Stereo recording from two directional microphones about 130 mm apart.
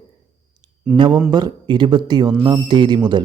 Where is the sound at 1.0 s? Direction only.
35° right (ahead or behind).